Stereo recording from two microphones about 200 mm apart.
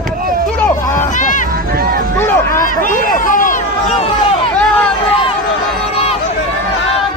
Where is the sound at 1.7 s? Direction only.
50° right (ahead or behind).